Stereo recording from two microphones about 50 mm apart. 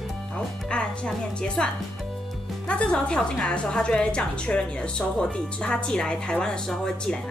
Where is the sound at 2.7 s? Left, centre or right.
Left.